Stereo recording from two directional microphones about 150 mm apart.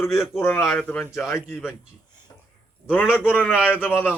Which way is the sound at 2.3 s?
25° left (ahead or behind).